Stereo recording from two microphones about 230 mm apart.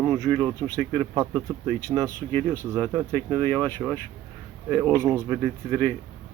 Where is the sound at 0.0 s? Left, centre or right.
Centre.